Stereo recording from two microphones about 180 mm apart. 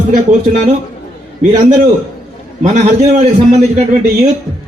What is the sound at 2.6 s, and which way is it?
Speech, 40° right (ahead or behind).